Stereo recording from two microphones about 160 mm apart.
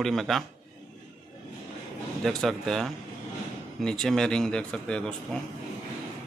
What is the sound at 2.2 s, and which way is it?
A man's voice, centre (ahead or behind).